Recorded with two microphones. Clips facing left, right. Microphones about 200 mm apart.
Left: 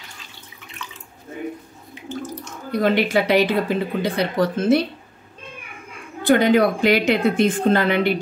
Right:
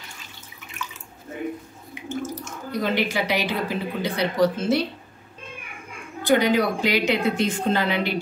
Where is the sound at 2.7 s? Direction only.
55° left (ahead or behind).